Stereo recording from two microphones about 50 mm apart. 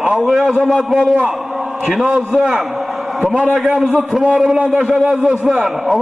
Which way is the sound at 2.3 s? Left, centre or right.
Centre.